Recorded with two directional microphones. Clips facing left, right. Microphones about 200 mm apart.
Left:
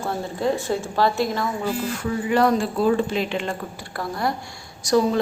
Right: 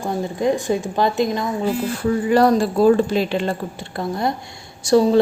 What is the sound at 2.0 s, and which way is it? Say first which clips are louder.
Speech: right 5 dB; 35° right (ahead or behind).